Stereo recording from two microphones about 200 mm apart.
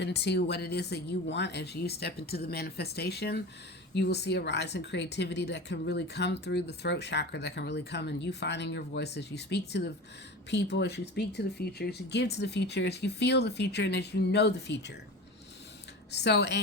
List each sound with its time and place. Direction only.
0.0 s speech: 55° left (ahead or behind)
16.1 s speech: 55° left (ahead or behind)